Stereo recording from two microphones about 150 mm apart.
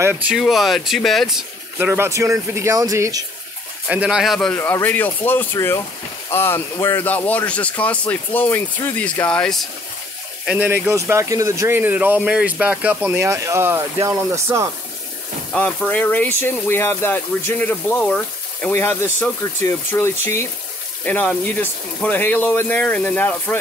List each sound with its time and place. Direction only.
0.0 s speech: 10° right (ahead or behind)
0.4 s speech: centre (ahead or behind)
1.8 s speech: 15° right (ahead or behind)
3.9 s speech: 5° right (ahead or behind)
10.4 s speech: 10° right (ahead or behind)
15.5 s speech: 10° left (ahead or behind)
18.7 s speech: 15° left (ahead or behind)